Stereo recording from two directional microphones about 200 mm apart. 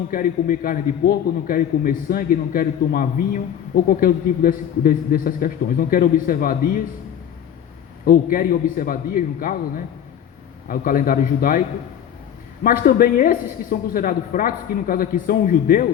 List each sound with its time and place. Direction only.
0.1 s a man's voice: 45° left (ahead or behind)
8.0 s a man's voice: 45° left (ahead or behind)
12.6 s a man's voice: 45° left (ahead or behind)